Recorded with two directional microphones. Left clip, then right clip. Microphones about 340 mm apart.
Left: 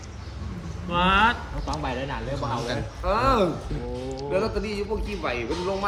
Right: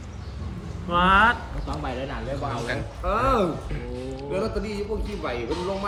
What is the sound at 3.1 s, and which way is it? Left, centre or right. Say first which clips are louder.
A man's voice: left 1 dB; left.